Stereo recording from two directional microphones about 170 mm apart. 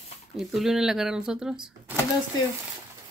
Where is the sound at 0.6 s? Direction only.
5° right (ahead or behind).